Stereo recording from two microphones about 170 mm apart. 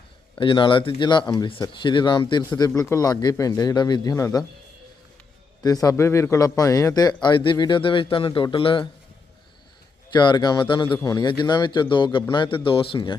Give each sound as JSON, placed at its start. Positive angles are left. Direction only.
{"t": 0.3, "sound": "speech", "side_deg": 30}
{"t": 5.6, "sound": "speech", "side_deg": 20}
{"t": 10.1, "sound": "speech", "side_deg": 25}